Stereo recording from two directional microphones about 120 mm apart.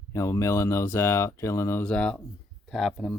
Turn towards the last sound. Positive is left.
turn(degrees=0)  # may be behind; listen again after turning